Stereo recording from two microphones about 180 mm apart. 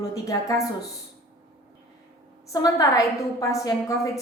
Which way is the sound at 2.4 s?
20° left (ahead or behind).